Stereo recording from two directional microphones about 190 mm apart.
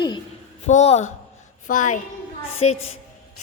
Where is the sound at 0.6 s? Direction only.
35° left (ahead or behind).